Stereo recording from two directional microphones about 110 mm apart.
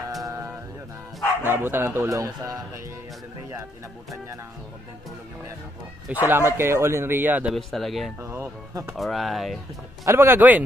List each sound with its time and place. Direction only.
0.2 s a sound: 30° right (ahead or behind)
1.4 s speech: 20° right (ahead or behind)
6.0 s speech: 15° right (ahead or behind)
7.5 s speech: centre (ahead or behind)
8.2 s speech: 25° right (ahead or behind)
8.9 s speech: centre (ahead or behind)
10.0 s speech: 20° right (ahead or behind)